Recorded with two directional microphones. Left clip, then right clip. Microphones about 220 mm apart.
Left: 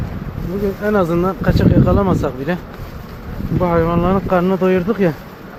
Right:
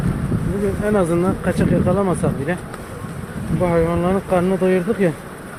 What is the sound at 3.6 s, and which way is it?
Speech, 20° left (ahead or behind).